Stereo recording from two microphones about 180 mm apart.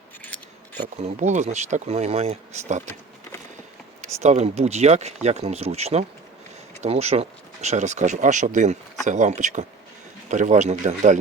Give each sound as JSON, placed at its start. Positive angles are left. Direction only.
{"t": 0.9, "sound": "speech", "side_deg": -40}
{"t": 4.0, "sound": "speech", "side_deg": -40}